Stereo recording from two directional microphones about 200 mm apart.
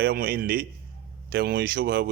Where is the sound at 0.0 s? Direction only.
50° right (ahead or behind).